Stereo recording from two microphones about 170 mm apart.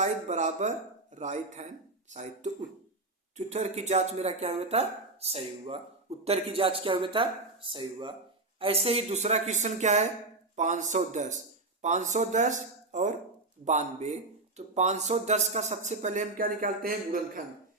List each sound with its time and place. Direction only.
0.0 s speech: 45° right (ahead or behind)